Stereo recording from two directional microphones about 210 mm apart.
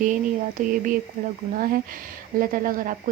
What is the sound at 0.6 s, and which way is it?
Speech, 40° right (ahead or behind).